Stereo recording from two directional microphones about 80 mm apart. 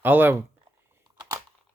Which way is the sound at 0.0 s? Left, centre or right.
Right.